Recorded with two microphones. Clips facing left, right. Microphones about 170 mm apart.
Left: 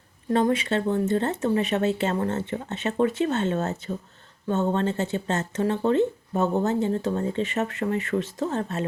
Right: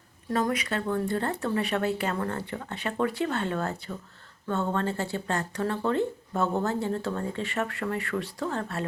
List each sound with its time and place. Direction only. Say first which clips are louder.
0.3 s speech: left 5 dB; 25° left (ahead or behind)